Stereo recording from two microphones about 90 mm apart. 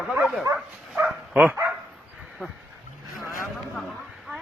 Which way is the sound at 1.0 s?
15° right (ahead or behind).